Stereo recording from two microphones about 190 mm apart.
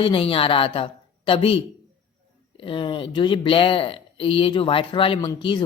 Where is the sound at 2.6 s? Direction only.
25° left (ahead or behind).